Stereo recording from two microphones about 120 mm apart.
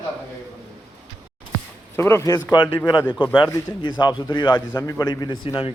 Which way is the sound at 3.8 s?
40° left (ahead or behind).